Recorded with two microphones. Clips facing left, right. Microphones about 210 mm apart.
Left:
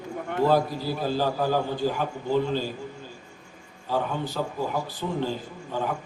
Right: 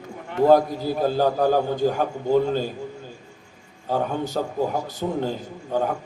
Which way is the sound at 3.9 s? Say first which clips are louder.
Right 3 dB; 45° right (ahead or behind).